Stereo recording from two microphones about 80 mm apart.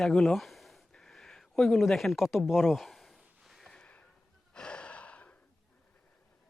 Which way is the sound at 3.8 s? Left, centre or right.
Centre.